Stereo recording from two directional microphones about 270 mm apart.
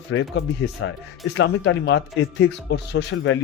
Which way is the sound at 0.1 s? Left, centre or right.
Left.